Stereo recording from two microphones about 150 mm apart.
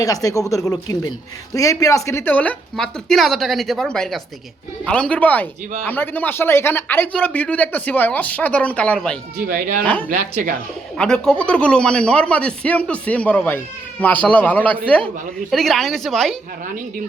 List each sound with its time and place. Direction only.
0.0 s speech: 25° left (ahead or behind); by 9.1 s 5° left (ahead or behind)
9.5 s speech: 70° right (ahead or behind)
9.8 s speech: 10° left (ahead or behind)
10.1 s speech: 65° right (ahead or behind)
10.9 s speech: 5° left (ahead or behind)